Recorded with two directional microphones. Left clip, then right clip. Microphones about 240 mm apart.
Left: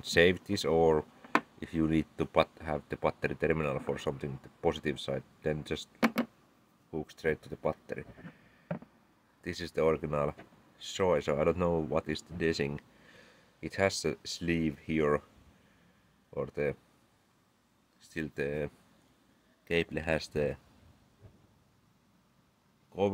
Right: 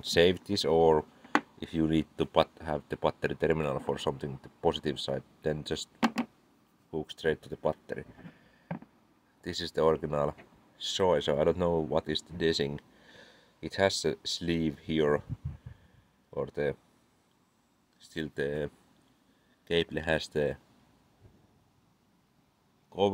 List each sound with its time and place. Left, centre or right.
0.0 s speech: centre
6.9 s speech: centre
9.4 s speech: centre
16.3 s speech: centre
18.0 s speech: centre
19.7 s speech: centre